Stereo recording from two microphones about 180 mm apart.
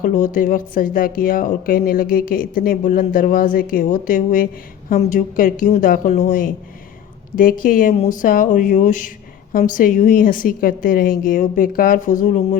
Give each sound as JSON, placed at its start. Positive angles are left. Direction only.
{"t": 0.0, "sound": "speech", "side_deg": 50}